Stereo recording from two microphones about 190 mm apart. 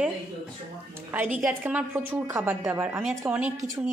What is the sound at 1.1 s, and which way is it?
A woman's voice, 10° right (ahead or behind).